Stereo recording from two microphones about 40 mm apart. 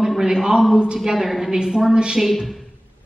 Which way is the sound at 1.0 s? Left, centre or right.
Centre.